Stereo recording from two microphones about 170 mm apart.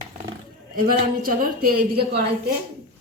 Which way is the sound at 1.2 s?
60° right (ahead or behind).